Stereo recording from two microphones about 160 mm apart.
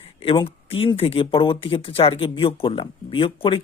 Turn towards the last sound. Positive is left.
turn(degrees=35)  # may be behind; listen again after turning